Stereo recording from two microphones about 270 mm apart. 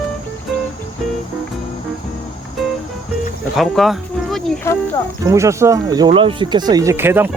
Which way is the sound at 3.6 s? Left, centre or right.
Centre.